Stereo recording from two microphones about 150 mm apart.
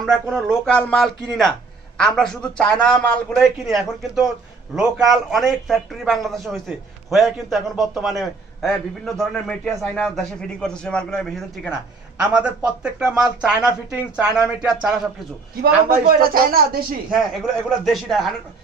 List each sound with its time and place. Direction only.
0.0 s a man's voice: 5° left (ahead or behind)
15.6 s speech: 80° right
17.1 s a man's voice: centre (ahead or behind)